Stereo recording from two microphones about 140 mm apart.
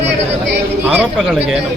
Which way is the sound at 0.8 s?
10° right (ahead or behind).